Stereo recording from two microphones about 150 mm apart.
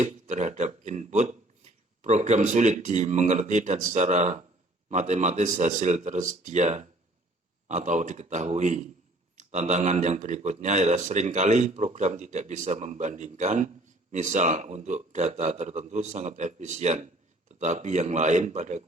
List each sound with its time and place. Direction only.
0.0 s a man's voice: 50° right (ahead or behind)